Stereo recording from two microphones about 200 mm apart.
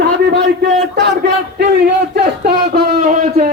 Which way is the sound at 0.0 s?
55° right (ahead or behind).